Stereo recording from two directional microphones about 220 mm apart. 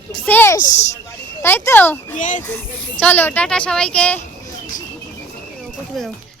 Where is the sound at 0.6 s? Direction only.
30° left (ahead or behind).